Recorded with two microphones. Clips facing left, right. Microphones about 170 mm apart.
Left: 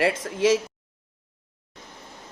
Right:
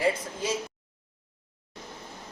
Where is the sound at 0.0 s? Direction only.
85° left.